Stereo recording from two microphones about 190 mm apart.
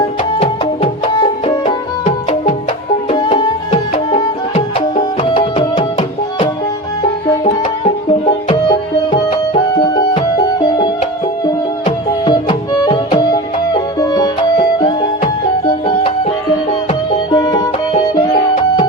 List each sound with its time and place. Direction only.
0.3 s music: 30° left (ahead or behind)
17.3 s music: 20° left (ahead or behind)